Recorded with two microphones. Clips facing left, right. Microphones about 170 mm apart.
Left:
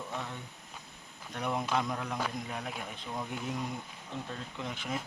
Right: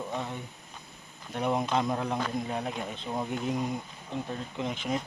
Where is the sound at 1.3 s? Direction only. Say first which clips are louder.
Right 5 dB; 25° right (ahead or behind).